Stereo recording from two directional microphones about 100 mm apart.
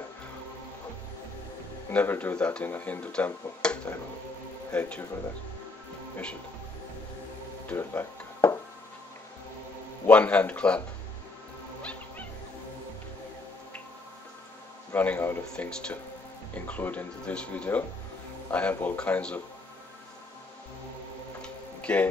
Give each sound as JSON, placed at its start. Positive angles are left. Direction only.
{"t": 1.9, "sound": "speech", "side_deg": 20}
{"t": 7.7, "sound": "music", "side_deg": 25}
{"t": 10.0, "sound": "speech", "side_deg": 15}
{"t": 11.8, "sound": "music", "side_deg": 15}
{"t": 15.0, "sound": "speech", "side_deg": 20}
{"t": 21.4, "sound": "tick-tock", "side_deg": 15}